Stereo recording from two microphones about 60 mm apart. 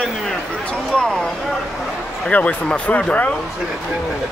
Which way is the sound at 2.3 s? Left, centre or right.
Left.